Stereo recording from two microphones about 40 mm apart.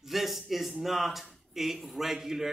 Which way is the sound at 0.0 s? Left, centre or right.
Centre.